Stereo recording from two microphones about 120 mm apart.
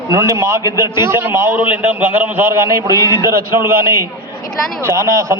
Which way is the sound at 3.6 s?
25° right (ahead or behind).